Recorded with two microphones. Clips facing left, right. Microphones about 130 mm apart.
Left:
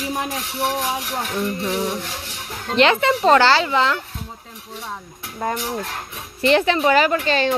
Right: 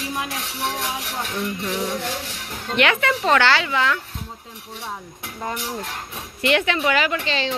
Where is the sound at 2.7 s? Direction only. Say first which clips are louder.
Left 4 dB; 30° left (ahead or behind).